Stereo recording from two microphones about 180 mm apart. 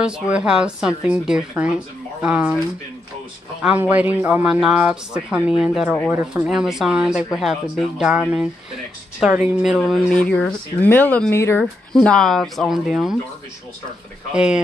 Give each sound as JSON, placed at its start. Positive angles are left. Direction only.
{"t": 0.0, "sound": "speech", "side_deg": -5}
{"t": 3.6, "sound": "speech", "side_deg": -10}
{"t": 14.3, "sound": "speech", "side_deg": -5}